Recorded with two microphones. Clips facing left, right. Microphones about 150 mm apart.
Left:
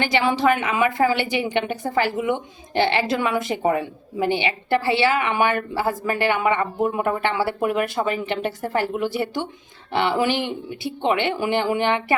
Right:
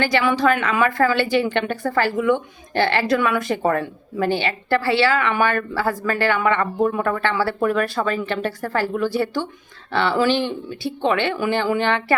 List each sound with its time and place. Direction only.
0.0 s a woman's voice: 20° left (ahead or behind)